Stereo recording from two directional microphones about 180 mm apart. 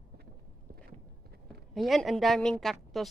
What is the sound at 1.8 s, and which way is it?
A woman's voice, centre (ahead or behind).